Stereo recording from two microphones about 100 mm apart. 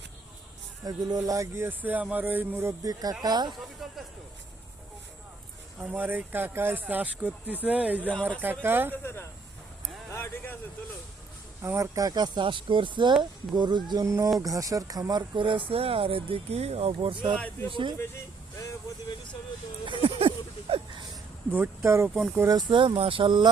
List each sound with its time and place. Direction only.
0.9 s speech: 40° right (ahead or behind); by 2.7 s 20° right (ahead or behind)
2.8 s speech: 40° right (ahead or behind)
5.8 s speech: 15° right (ahead or behind)
10.1 s a sound: 25° left (ahead or behind)
11.6 s speech: 25° right (ahead or behind)
11.9 s speech: 40° right (ahead or behind)
14.0 s speech: 30° right (ahead or behind); by 15.6 s 55° right (ahead or behind)
15.7 s speech: 70° right (ahead or behind); by 17.9 s 55° right (ahead or behind)
19.8 s a sound: 65° right (ahead or behind)
21.8 s speech: 30° right (ahead or behind)
22.4 s speech: 45° right (ahead or behind)